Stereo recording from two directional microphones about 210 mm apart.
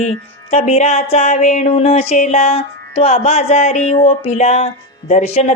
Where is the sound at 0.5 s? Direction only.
30° left (ahead or behind).